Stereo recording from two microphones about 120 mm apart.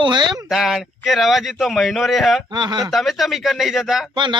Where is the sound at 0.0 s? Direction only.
40° right (ahead or behind).